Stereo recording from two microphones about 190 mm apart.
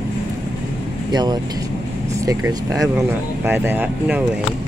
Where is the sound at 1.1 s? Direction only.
20° right (ahead or behind).